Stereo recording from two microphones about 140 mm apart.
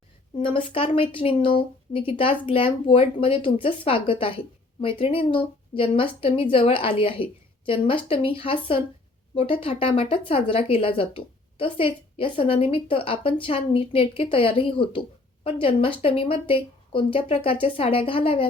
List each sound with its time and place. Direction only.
0.4 s speech: 40° left (ahead or behind)